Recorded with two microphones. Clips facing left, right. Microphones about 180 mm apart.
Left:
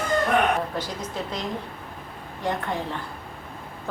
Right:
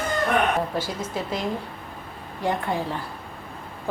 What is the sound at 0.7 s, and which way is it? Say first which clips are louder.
Speech: right 2 dB; 5° right (ahead or behind).